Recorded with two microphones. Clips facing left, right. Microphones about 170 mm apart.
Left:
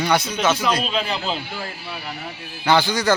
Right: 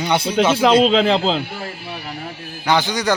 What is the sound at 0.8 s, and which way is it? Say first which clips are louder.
Speech: right 9 dB; 90° right.